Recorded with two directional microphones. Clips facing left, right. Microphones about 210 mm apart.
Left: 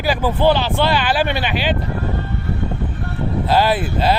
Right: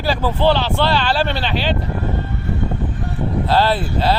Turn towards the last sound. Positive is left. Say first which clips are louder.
# left 1 dB
turn(degrees=15)  # may be behind; listen again after turning